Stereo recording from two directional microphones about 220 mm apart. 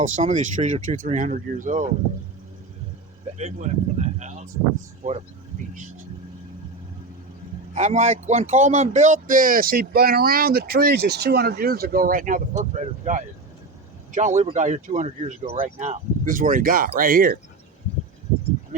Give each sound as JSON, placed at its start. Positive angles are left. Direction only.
{"t": 0.0, "sound": "speech", "side_deg": -35}
{"t": 3.3, "sound": "speech", "side_deg": -30}
{"t": 7.8, "sound": "speech", "side_deg": -30}